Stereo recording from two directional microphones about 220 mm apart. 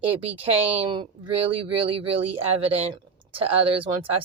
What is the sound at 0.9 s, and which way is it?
Speech, 20° right (ahead or behind).